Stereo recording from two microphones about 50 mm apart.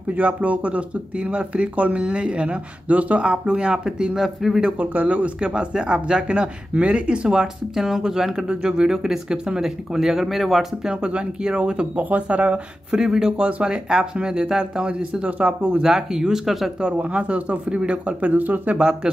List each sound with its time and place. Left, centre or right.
0.1 s speech: right; by 4.6 s centre
4.6 s speech: right; by 10.7 s centre
10.9 s speech: right
12.0 s speech: right
12.9 s speech: centre; by 15.8 s right
15.8 s speech: centre
16.8 s speech: right